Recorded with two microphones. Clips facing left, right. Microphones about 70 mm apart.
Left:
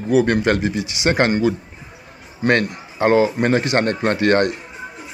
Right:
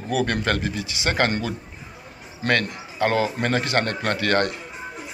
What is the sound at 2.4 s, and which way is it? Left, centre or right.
Speech, left.